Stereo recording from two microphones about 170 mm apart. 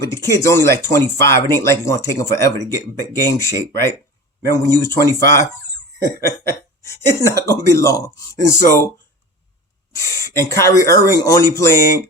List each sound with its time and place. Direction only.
0.0 s speech: 15° left (ahead or behind)
6.0 s cough: 70° right (ahead or behind)
6.8 s speech: 20° left (ahead or behind)
9.9 s speech: 20° left (ahead or behind)